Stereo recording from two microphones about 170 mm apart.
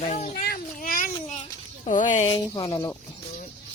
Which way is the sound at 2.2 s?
20° left (ahead or behind).